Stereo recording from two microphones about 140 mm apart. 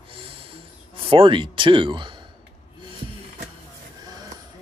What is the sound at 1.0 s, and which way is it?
Speech, 40° right (ahead or behind).